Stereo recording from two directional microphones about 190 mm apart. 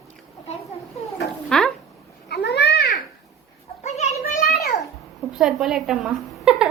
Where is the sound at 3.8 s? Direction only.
35° left (ahead or behind).